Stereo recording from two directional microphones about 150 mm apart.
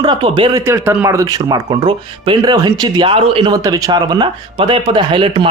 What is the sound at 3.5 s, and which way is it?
Speech, 25° right (ahead or behind).